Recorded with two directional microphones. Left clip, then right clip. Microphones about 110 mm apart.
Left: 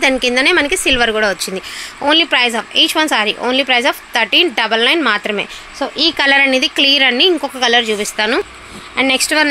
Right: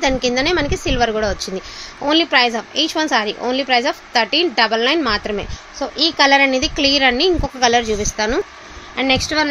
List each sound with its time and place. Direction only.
0.0 s a woman's voice: 15° left (ahead or behind)
5.8 s speech: 45° left (ahead or behind)
6.1 s a woman's voice: 25° left (ahead or behind)
7.4 s a woman's voice: centre (ahead or behind)
8.9 s speech: 20° left (ahead or behind)